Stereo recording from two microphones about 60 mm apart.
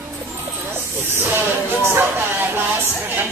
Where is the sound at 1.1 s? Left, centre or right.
Right.